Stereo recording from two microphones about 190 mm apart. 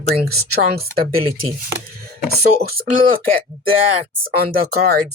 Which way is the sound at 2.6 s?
55° right (ahead or behind).